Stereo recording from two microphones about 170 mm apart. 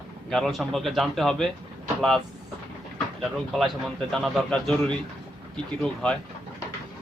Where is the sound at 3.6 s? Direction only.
Centre (ahead or behind).